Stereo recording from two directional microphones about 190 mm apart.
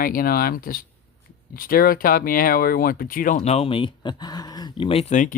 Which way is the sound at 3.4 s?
30° left (ahead or behind).